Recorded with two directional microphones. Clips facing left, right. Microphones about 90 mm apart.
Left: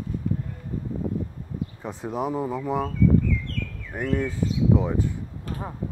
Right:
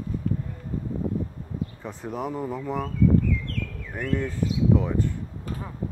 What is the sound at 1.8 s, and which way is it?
Speech, 20° left (ahead or behind).